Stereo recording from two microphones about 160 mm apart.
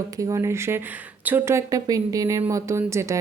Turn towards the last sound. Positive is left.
turn(degrees=-20)  # may be behind; listen again after turning